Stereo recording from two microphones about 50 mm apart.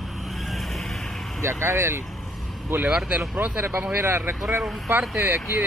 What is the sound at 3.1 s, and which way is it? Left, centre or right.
Speech, right.